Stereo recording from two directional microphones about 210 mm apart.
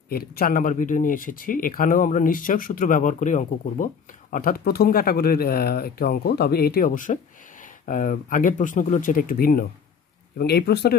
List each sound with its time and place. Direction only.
0.1 s speech: 45° left (ahead or behind)